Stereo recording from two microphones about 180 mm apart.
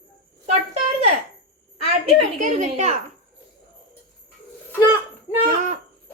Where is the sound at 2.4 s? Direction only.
40° right (ahead or behind).